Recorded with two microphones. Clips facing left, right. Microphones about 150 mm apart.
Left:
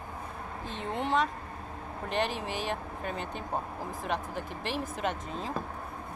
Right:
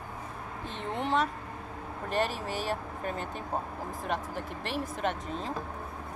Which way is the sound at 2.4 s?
35° right (ahead or behind).